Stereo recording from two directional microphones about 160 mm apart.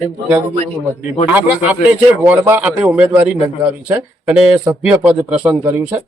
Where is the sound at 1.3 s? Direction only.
10° right (ahead or behind).